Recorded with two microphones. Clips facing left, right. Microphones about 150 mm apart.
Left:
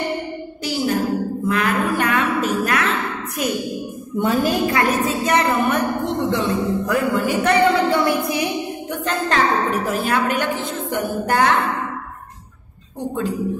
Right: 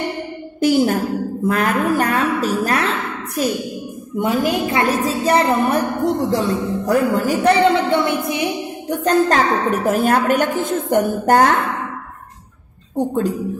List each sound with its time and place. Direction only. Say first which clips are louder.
0.6 s music: right 8 dB; 50° right (ahead or behind)
1.5 s a woman's voice: right 3 dB; 40° right (ahead or behind)
4.2 s a woman's voice: even; 15° right (ahead or behind)
4.9 s a woman's voice: right 2 dB; 35° right (ahead or behind)
7.7 s speech: right 1 dB; 25° right (ahead or behind)
8.8 s a woman's voice: right 10 dB; 40° right (ahead or behind)
12.9 s a woman's voice: right 5 dB; 45° right (ahead or behind)